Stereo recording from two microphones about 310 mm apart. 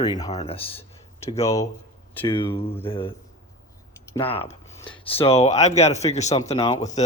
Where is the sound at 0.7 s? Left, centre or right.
Centre.